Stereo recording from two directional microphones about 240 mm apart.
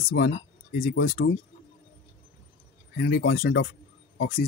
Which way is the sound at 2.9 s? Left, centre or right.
Left.